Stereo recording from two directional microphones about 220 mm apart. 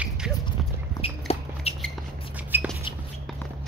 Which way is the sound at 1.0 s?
25° left (ahead or behind).